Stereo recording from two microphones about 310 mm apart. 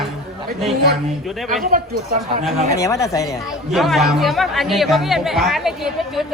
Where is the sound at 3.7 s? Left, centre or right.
Centre.